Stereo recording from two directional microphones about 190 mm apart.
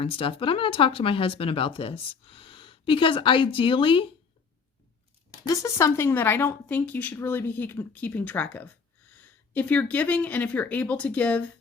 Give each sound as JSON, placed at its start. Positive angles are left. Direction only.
{"t": 0.0, "sound": "speech", "side_deg": 30}
{"t": 5.5, "sound": "a woman's voice", "side_deg": 15}